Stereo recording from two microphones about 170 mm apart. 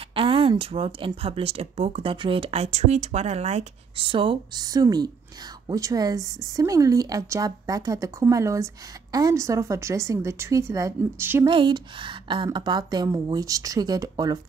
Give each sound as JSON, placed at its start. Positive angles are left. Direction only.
{"t": 0.1, "sound": "a woman's voice", "side_deg": -30}
{"t": 11.5, "sound": "speech", "side_deg": -30}